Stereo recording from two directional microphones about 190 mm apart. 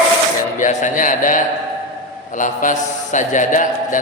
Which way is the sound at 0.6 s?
40° left (ahead or behind).